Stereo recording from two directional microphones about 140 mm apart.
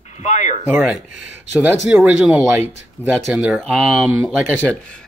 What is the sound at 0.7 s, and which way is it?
Speech, 15° right (ahead or behind).